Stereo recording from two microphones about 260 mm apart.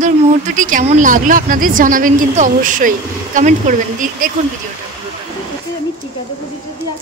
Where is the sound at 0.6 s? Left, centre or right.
Right.